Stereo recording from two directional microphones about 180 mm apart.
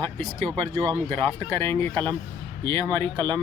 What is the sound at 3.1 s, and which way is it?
Speech, 25° right (ahead or behind).